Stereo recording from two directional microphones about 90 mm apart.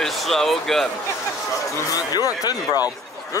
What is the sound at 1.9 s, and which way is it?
Speech, 45° left (ahead or behind).